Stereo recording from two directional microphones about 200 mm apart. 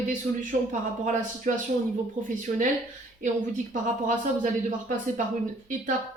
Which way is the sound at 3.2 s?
40° right (ahead or behind).